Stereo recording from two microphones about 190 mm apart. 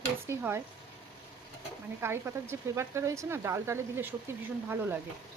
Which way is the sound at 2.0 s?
15° right (ahead or behind).